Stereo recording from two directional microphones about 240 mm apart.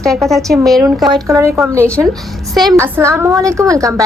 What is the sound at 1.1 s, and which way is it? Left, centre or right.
A woman's voice, centre.